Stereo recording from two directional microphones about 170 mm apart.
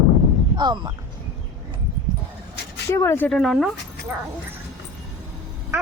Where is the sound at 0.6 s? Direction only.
25° right (ahead or behind).